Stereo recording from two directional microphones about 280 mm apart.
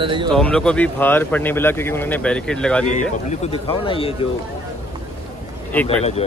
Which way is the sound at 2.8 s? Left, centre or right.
Left.